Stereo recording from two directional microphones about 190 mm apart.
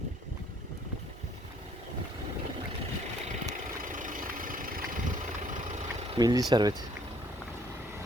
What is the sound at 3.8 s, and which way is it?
Vehicle, 45° right (ahead or behind).